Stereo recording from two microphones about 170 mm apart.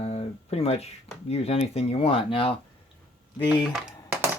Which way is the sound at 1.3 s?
35° left (ahead or behind).